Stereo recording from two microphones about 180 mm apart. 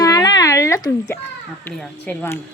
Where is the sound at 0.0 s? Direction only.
20° left (ahead or behind).